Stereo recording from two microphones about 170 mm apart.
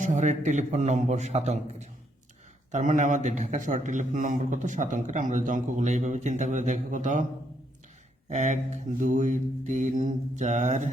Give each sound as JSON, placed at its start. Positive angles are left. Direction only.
{"t": 0.0, "sound": "a man's voice", "side_deg": -45}
{"t": 8.3, "sound": "a man's voice", "side_deg": -45}